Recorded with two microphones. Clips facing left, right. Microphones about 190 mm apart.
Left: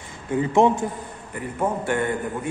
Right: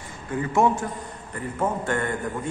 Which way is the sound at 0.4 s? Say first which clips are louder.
Left 3 dB; 20° left (ahead or behind).